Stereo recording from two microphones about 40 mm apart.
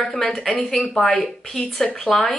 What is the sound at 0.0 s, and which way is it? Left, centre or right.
A woman's voice, centre.